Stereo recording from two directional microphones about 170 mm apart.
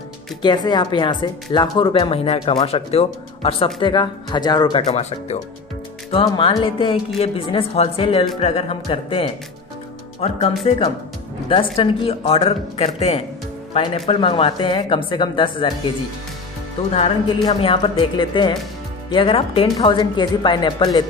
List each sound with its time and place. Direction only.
0.4 s speech: 25° left (ahead or behind)
4.8 s a woman's voice: 40° left (ahead or behind)
16.9 s speech: 35° left (ahead or behind)